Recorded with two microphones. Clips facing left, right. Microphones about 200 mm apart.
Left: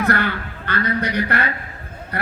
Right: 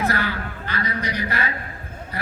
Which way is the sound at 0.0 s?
60° left (ahead or behind).